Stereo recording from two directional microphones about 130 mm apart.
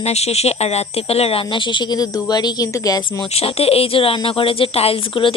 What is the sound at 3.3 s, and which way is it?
Speech, 50° left (ahead or behind).